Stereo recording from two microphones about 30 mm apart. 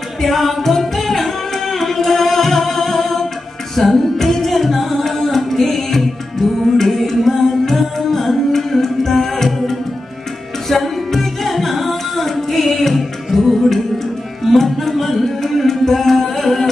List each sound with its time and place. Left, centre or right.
0.2 s music: centre
10.7 s tabla: centre
14.4 s music: centre